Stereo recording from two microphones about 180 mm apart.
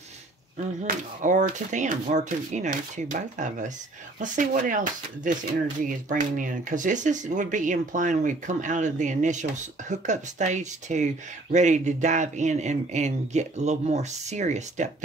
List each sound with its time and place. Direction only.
0.8 s speech: 45° right (ahead or behind)